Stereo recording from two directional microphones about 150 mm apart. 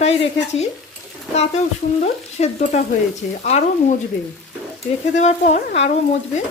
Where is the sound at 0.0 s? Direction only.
45° left (ahead or behind).